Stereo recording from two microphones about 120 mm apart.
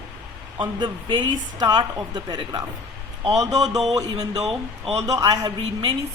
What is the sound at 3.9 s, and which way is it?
Speech, 30° right (ahead or behind).